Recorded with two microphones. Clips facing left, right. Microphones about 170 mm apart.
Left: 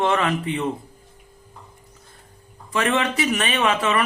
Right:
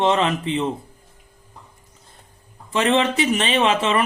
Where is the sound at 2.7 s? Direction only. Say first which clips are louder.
Right 3 dB; 25° right (ahead or behind).